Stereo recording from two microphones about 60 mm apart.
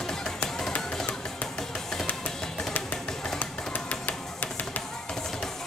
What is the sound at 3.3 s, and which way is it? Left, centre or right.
Music, left.